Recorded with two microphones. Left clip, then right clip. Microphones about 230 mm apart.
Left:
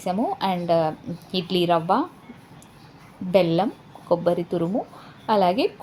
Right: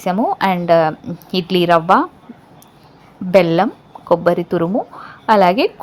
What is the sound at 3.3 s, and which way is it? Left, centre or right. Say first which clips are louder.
A woman's voice: right 7 dB; right.